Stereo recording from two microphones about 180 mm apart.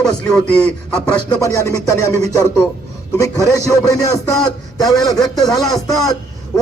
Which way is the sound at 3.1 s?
20° left (ahead or behind).